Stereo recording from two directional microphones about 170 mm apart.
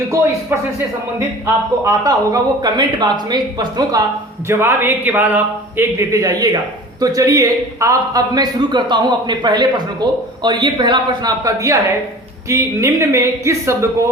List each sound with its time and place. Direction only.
0.5 s a man's voice: 10° right (ahead or behind)
1.8 s a man's voice: 20° right (ahead or behind)
4.4 s a man's voice: 15° right (ahead or behind)